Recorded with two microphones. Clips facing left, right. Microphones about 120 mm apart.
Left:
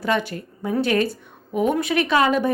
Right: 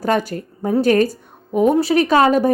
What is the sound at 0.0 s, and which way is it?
Speech, 40° right (ahead or behind).